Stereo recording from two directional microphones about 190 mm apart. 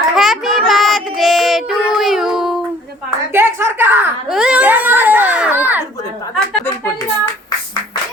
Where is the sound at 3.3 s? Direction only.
10° right (ahead or behind).